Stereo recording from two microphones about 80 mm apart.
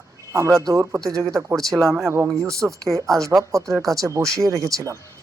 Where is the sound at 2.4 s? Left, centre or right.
Right.